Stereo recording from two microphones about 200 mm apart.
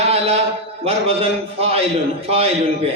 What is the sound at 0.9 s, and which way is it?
A man's voice, 30° right (ahead or behind).